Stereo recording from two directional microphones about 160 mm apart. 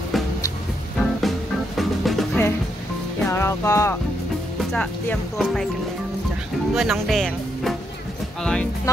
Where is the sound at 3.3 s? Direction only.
15° left (ahead or behind).